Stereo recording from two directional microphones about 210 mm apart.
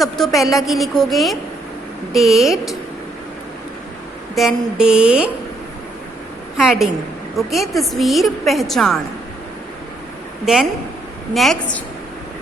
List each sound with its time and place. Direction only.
0.3 s a woman's voice: centre (ahead or behind)
4.4 s a woman's voice: centre (ahead or behind)
6.6 s a woman's voice: centre (ahead or behind)
10.4 s a woman's voice: centre (ahead or behind)